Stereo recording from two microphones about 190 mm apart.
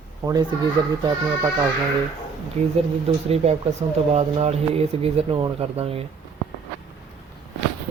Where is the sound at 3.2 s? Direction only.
35° right (ahead or behind).